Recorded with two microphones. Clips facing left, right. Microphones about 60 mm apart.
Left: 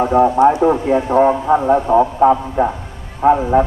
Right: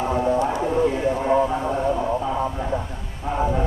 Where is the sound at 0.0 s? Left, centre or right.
Left.